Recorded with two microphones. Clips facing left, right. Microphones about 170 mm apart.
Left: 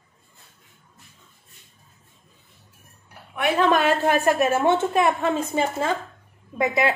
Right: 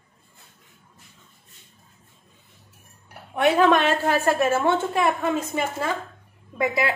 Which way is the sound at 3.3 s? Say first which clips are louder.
Right 4 dB; 20° right (ahead or behind).